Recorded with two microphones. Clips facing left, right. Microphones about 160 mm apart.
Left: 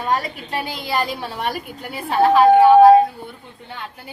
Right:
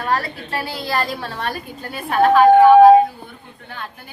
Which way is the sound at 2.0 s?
25° left (ahead or behind).